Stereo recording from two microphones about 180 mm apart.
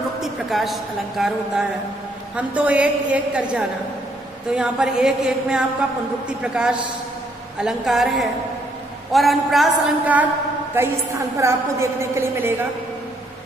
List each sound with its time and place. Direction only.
0.2 s a woman's voice: centre (ahead or behind)
10.7 s a woman's voice: 15° right (ahead or behind)